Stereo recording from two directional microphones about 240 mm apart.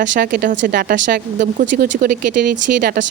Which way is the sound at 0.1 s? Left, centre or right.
Right.